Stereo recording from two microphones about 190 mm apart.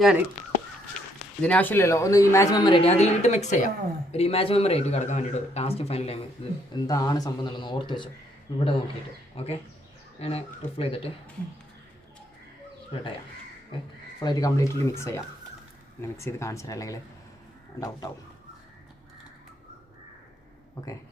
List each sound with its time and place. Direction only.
1.4 s speech: 10° left (ahead or behind); by 11.1 s 30° left (ahead or behind)
14.2 s speech: 20° left (ahead or behind)